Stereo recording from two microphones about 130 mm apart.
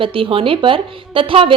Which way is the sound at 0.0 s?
45° right (ahead or behind).